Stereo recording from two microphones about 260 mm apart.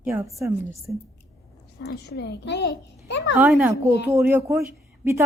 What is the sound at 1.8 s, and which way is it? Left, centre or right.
A child's voice, left.